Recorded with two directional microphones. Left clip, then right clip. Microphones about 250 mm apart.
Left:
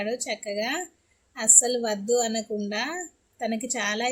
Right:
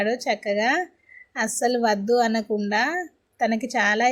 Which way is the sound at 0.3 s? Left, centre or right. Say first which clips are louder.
Right 7 dB; centre.